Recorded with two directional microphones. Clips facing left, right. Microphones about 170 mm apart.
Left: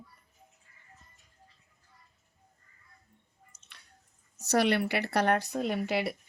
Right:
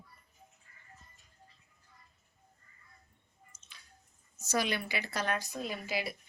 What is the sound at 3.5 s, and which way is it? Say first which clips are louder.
Squish: left 1 dB; 70° left (ahead or behind).